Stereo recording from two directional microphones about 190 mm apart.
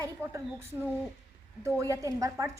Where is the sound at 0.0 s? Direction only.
15° right (ahead or behind).